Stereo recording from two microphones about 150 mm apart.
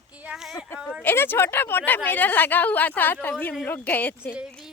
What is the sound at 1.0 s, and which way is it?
A woman's voice, 15° left (ahead or behind).